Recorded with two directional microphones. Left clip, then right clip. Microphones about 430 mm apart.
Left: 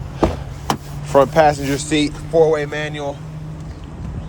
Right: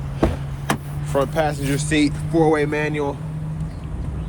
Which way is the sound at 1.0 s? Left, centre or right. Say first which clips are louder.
Left 8 dB; centre.